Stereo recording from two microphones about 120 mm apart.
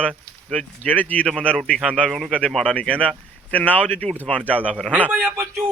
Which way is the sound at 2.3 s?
5° left (ahead or behind).